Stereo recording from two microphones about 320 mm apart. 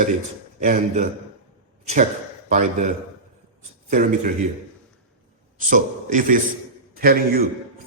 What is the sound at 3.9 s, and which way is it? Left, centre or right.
Speech, right.